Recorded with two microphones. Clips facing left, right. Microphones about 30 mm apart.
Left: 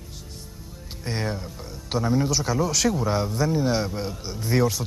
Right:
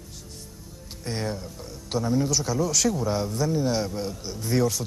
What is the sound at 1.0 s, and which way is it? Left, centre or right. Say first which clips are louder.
A man's voice: left 1 dB; centre.